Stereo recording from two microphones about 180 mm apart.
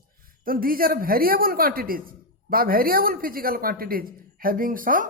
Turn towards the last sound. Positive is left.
turn(degrees=-50)  # may be behind; listen again after turning